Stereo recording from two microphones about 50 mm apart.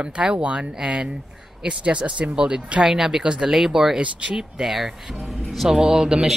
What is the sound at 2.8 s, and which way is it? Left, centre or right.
Speech, centre.